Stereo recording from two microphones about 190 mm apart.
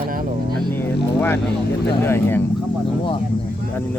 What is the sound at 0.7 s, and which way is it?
Speech, 10° left (ahead or behind).